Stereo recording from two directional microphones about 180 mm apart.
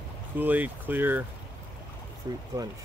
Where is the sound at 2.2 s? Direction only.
20° right (ahead or behind).